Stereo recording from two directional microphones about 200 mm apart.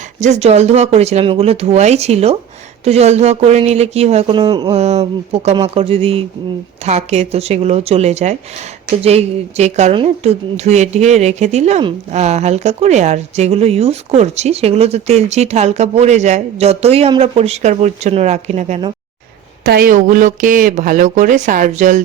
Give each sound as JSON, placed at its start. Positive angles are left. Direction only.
{"t": 0.2, "sound": "a woman's voice", "side_deg": -35}
{"t": 19.6, "sound": "a woman's voice", "side_deg": -45}